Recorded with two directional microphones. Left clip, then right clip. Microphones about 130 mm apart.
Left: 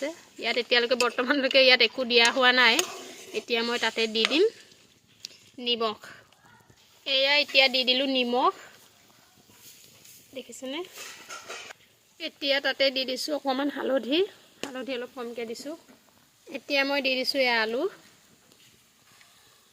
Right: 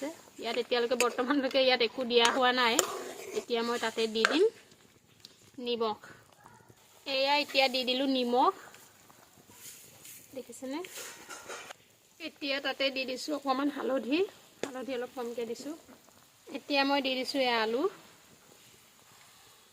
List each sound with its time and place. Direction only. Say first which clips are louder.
0.0 s speech: left 7 dB; 30° left (ahead or behind)
2.8 s speech: right 1 dB; 30° right (ahead or behind)
3.5 s speech: left 5 dB; 30° left (ahead or behind)
5.2 s a sound: left 6 dB; 30° left (ahead or behind)
7.0 s speech: left 5 dB; 30° left (ahead or behind)
10.3 s speech: left 4 dB; 30° left (ahead or behind)
12.1 s speech: left 8 dB; 60° left (ahead or behind)
14.7 s stir: left 4 dB; 55° left (ahead or behind)
16.5 s speech: left 3 dB; 30° left (ahead or behind)